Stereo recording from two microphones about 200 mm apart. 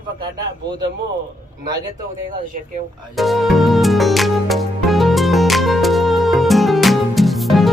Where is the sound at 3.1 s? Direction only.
Centre (ahead or behind).